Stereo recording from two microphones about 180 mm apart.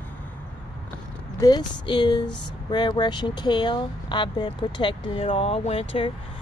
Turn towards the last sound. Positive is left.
turn(degrees=30)  # may be behind; listen again after turning